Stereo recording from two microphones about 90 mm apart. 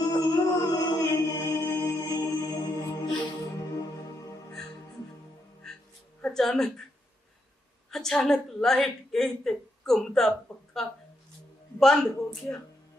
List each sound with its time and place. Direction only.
0.0 s music: 40° left (ahead or behind)
6.2 s speech: 5° left (ahead or behind)
7.9 s a woman's voice: 5° left (ahead or behind)